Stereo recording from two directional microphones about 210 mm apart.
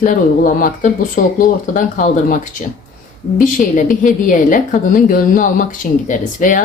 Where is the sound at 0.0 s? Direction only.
40° left (ahead or behind).